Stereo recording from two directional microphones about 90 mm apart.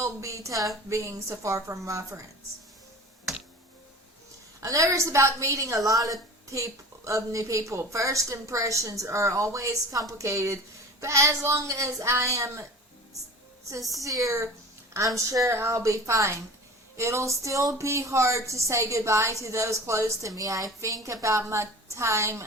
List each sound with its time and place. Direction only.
0.0 s a woman's voice: 35° right (ahead or behind)
4.6 s a woman's voice: 35° right (ahead or behind)
14.0 s a woman's voice: 40° right (ahead or behind)